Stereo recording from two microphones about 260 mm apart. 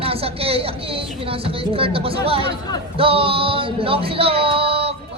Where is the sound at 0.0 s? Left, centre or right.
Right.